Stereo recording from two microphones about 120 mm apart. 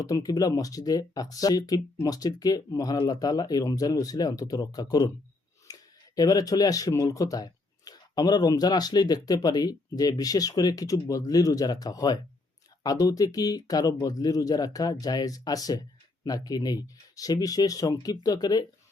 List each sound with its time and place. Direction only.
0.0 s speech: 30° left (ahead or behind)